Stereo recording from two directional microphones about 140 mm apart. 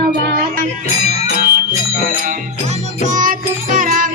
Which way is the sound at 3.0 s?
65° right (ahead or behind).